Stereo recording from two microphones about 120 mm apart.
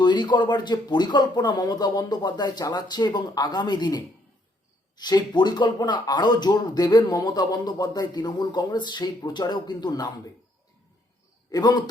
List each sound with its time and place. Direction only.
0.0 s speech: 40° left (ahead or behind)
11.5 s speech: 35° left (ahead or behind)